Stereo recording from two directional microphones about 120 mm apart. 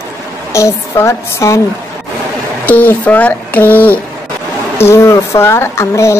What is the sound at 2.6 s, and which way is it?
Speech, 15° left (ahead or behind).